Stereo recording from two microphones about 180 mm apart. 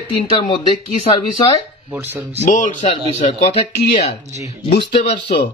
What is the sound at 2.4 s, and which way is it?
Speech, 45° left (ahead or behind).